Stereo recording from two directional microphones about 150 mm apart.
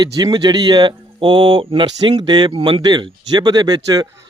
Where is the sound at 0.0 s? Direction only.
25° right (ahead or behind).